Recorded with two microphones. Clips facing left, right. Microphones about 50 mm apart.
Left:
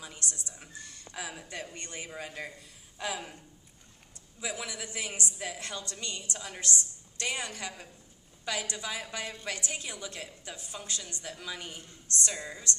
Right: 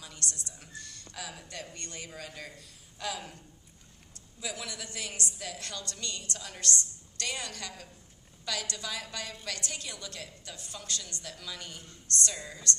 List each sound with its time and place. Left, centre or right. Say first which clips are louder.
0.0 s a sound: even; centre
0.5 s a woman's voice: even; centre
4.4 s a woman's voice: left 2 dB; centre